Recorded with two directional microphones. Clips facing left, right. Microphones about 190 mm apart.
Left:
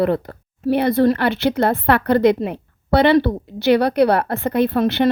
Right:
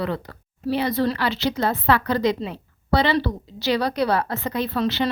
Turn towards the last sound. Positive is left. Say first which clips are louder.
# left 6 dB
turn(degrees=55)  # may be behind; listen again after turning